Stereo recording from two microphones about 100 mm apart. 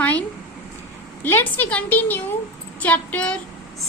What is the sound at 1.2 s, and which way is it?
A woman's voice, 20° left (ahead or behind).